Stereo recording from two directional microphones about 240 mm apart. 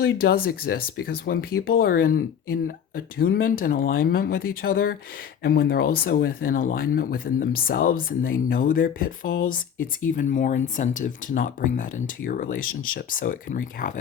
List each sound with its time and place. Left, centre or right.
0.0 s speech: left